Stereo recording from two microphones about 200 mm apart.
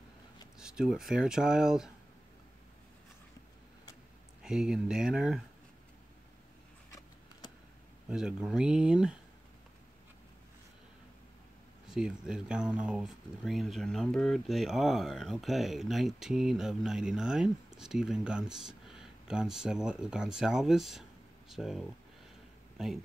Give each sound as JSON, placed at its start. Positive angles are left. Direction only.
{"t": 0.6, "sound": "speech", "side_deg": -5}
{"t": 4.4, "sound": "speech", "side_deg": -5}
{"t": 8.1, "sound": "speech", "side_deg": -5}
{"t": 11.9, "sound": "speech", "side_deg": -5}